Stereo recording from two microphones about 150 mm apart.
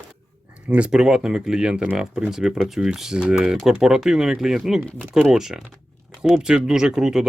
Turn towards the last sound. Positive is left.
turn(degrees=-5)  # may be behind; listen again after turning